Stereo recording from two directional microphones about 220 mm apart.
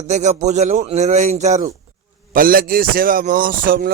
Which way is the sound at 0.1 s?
30° right (ahead or behind).